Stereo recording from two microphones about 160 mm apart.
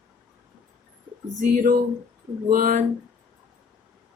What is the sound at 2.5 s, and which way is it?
Speech, 55° right (ahead or behind).